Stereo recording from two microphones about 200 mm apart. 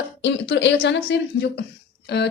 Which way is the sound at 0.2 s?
60° left (ahead or behind).